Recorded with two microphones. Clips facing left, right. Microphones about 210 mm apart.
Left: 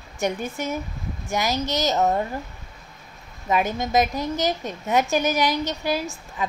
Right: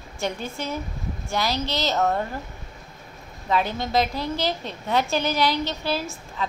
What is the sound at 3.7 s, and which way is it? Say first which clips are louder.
A woman's voice: left 2 dB; 15° left (ahead or behind).